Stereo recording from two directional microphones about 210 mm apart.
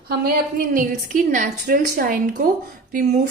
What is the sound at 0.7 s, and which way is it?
A woman's voice, 40° right (ahead or behind).